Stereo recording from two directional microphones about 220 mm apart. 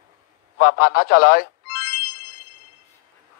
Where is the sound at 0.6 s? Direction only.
40° left (ahead or behind).